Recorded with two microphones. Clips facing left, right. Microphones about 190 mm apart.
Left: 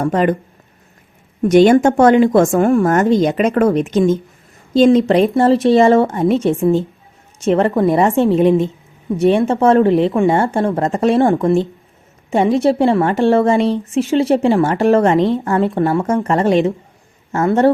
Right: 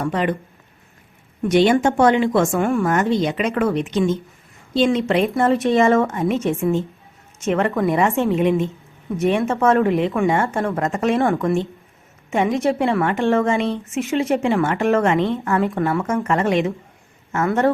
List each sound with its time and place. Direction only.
0.0 s speech: 45° left (ahead or behind)
1.4 s a woman's voice: 45° left (ahead or behind)